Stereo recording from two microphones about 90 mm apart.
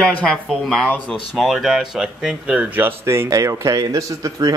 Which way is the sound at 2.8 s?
25° right (ahead or behind).